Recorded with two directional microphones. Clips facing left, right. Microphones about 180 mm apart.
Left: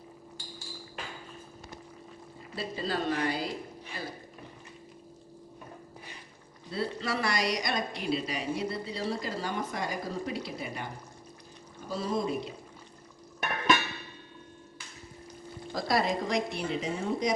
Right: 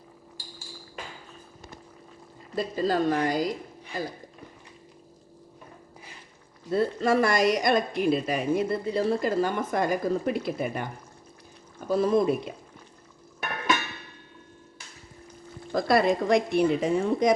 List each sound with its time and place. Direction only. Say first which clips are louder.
2.6 s speech: right 8 dB; 45° right (ahead or behind)
6.7 s speech: right 9 dB; 50° right (ahead or behind)
11.9 s speech: right 9 dB; 55° right (ahead or behind)
15.7 s speech: right 6 dB; 55° right (ahead or behind)